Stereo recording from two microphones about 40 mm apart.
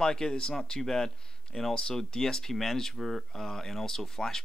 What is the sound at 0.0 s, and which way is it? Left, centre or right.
Speech, centre.